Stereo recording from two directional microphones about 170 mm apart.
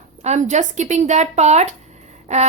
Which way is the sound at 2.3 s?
45° right (ahead or behind).